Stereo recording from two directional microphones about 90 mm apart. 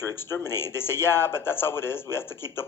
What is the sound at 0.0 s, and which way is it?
Speech, 25° left (ahead or behind).